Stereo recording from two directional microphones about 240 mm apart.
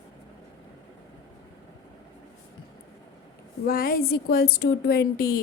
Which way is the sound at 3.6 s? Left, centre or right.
Left.